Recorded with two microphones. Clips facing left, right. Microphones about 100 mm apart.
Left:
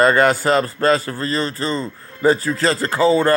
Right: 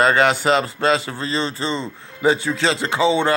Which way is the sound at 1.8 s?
Centre (ahead or behind).